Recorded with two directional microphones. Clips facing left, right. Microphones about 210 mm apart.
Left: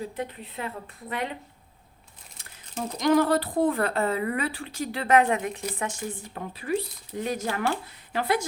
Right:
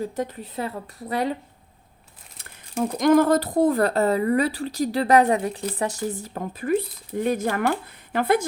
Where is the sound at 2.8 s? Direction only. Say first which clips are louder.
Right 5 dB; 50° right (ahead or behind).